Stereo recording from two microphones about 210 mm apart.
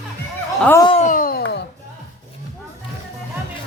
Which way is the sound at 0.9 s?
35° left (ahead or behind).